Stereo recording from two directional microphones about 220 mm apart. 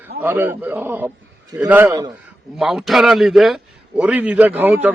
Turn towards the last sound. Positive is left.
turn(degrees=-10)  # may be behind; listen again after turning